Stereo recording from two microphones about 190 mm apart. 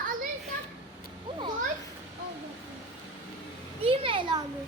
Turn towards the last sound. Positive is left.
turn(degrees=-25)  # may be behind; listen again after turning